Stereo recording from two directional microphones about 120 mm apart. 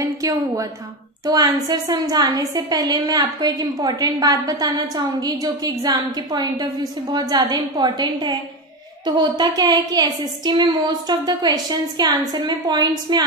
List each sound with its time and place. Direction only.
0.0 s a woman's voice: 30° right (ahead or behind)
9.4 s a woman's voice: 35° right (ahead or behind)